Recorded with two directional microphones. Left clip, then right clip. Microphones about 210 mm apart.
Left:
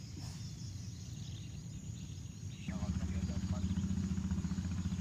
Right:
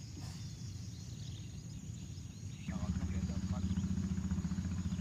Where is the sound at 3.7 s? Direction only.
50° left (ahead or behind).